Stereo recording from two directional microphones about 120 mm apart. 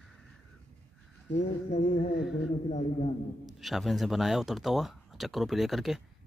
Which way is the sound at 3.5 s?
Centre (ahead or behind).